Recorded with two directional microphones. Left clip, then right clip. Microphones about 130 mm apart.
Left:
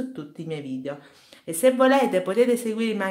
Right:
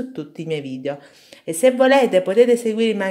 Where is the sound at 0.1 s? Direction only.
35° right (ahead or behind).